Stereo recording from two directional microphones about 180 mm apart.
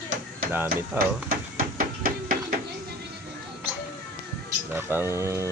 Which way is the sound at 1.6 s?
50° right (ahead or behind).